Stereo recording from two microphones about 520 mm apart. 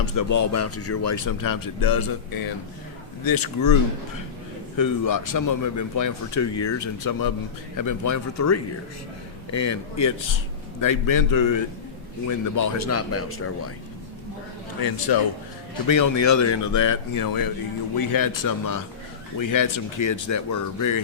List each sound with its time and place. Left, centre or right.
0.0 s a man's voice: left
4.8 s a man's voice: left
14.8 s a man's voice: left